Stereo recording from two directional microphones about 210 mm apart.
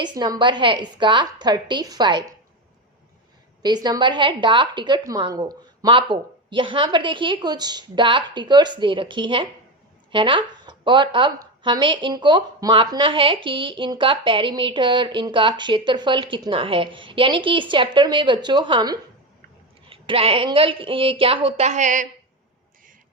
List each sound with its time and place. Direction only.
0.0 s speech: 20° right (ahead or behind)
3.6 s speech: 20° right (ahead or behind); by 22.0 s 35° right (ahead or behind)